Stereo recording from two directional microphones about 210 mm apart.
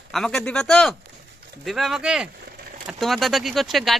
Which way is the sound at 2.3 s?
45° right (ahead or behind).